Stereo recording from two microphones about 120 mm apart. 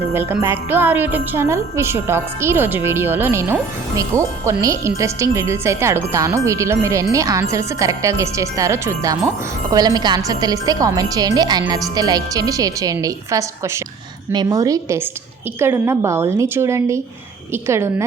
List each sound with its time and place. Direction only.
0.1 s jingle bell: 20° right (ahead or behind)
9.7 s speech: 35° right (ahead or behind)
11.7 s jingle bell: 30° right (ahead or behind)